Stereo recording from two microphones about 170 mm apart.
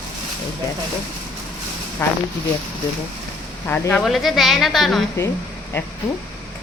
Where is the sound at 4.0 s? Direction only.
Centre (ahead or behind).